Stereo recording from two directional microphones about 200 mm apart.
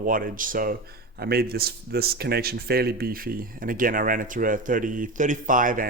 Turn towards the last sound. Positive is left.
turn(degrees=-40)  # may be behind; listen again after turning